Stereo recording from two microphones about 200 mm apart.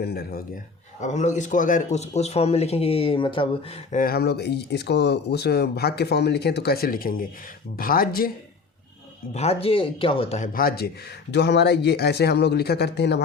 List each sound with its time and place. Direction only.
0.0 s speech: 50° left (ahead or behind)
1.0 s speech: 35° left (ahead or behind)
3.9 s speech: 50° left (ahead or behind)
9.3 s speech: 30° left (ahead or behind); by 13.2 s 55° left (ahead or behind)